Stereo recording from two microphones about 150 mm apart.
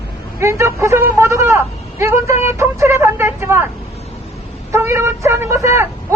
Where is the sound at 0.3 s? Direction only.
20° right (ahead or behind).